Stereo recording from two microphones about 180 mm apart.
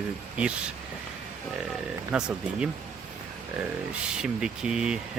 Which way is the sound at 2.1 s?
5° right (ahead or behind).